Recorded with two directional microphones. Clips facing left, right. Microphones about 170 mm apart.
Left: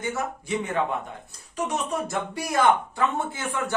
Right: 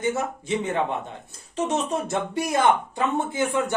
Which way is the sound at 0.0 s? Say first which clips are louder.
Right 4 dB; 20° right (ahead or behind).